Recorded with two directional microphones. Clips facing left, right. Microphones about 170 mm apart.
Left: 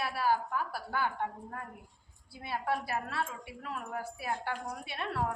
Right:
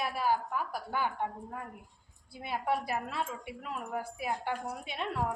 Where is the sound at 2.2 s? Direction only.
20° right (ahead or behind).